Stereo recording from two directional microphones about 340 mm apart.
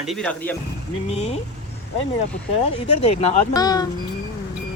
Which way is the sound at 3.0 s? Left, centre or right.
Centre.